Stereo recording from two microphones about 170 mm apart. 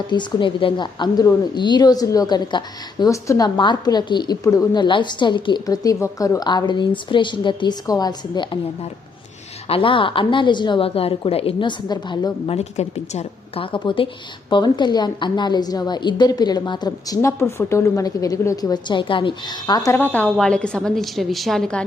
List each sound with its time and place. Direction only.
0.1 s a woman's voice: 25° left (ahead or behind)
12.5 s a woman's voice: 40° left (ahead or behind); by 21.8 s 5° left (ahead or behind)